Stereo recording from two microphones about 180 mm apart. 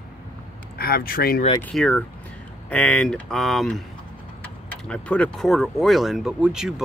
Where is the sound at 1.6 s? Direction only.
5° left (ahead or behind).